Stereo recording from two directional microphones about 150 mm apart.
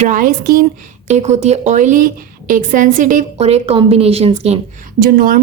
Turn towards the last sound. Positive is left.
turn(degrees=-80)